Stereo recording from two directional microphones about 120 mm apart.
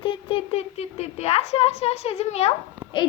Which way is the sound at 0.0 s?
45° left (ahead or behind).